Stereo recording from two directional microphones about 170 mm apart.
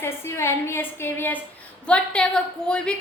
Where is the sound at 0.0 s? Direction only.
15° left (ahead or behind).